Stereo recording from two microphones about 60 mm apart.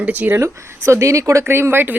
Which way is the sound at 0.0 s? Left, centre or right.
Right.